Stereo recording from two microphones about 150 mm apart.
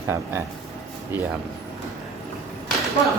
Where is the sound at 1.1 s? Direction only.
10° right (ahead or behind).